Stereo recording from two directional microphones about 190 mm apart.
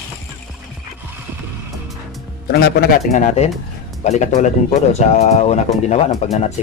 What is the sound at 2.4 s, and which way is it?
Speech, 55° left (ahead or behind).